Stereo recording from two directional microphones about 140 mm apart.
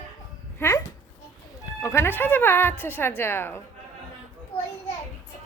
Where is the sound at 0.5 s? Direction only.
15° left (ahead or behind).